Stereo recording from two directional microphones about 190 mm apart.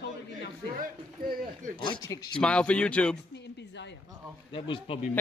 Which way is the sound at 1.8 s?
25° left (ahead or behind).